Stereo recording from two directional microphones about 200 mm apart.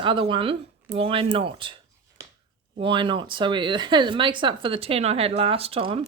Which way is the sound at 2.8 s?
25° right (ahead or behind).